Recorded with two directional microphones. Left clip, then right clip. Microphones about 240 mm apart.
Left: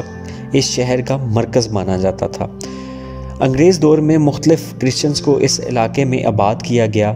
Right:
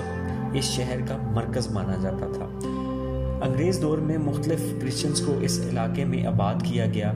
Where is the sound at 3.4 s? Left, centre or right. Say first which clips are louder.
Left 15 dB; left.